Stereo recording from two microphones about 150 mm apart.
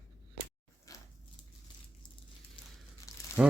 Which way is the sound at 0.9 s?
20° left (ahead or behind).